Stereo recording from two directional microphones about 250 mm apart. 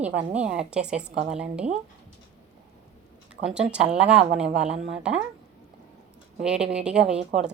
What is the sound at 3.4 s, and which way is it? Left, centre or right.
A woman's voice, centre.